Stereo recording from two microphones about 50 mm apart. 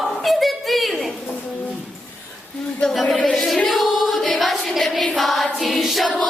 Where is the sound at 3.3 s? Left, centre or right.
Centre.